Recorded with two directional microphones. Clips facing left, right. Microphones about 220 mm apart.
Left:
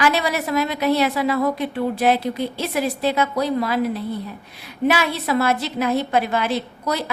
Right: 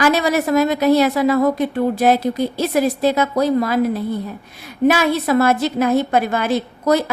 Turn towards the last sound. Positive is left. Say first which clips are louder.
# right 8 dB
turn(degrees=-45)  # may be behind; listen again after turning